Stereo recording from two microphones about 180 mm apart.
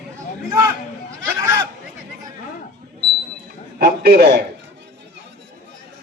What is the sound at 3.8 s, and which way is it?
Speech, 60° right (ahead or behind).